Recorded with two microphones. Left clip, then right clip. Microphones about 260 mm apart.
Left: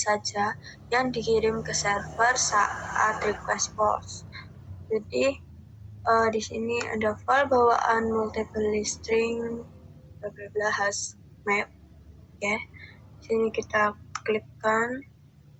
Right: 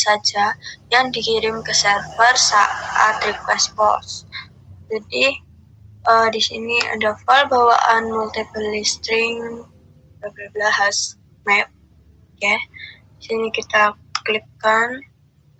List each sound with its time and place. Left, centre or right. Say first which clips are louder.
0.0 s a woman's voice: right 9 dB; right
12.4 s a sound: right 10 dB; right
13.3 s speech: right 7 dB; right